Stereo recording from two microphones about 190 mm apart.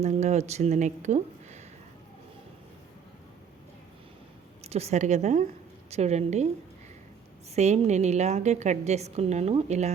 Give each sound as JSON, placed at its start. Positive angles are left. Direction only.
{"t": 0.0, "sound": "a woman's voice", "side_deg": -35}
{"t": 4.6, "sound": "a woman's voice", "side_deg": -35}
{"t": 7.5, "sound": "a woman's voice", "side_deg": -35}